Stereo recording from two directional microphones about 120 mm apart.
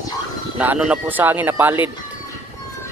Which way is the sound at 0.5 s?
15° right (ahead or behind).